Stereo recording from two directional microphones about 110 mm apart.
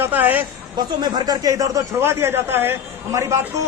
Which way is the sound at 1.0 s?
35° right (ahead or behind).